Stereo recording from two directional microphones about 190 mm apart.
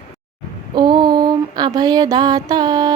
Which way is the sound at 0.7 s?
25° right (ahead or behind).